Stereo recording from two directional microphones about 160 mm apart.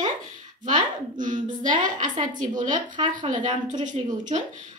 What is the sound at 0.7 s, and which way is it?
A woman's voice, 50° right (ahead or behind).